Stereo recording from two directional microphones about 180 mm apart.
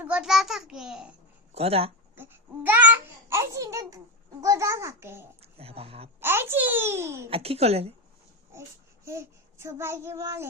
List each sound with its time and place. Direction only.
0.0 s a sound: 5° right (ahead or behind)
1.5 s speech: 35° right (ahead or behind)
2.1 s babbling: 10° right (ahead or behind)
5.4 s speech: 35° right (ahead or behind)
6.1 s a child's voice: 10° right (ahead or behind)
7.3 s speech: 35° right (ahead or behind)
9.0 s a child's voice: 15° right (ahead or behind)